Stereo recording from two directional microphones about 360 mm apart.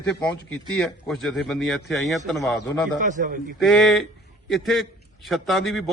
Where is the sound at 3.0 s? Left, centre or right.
Right.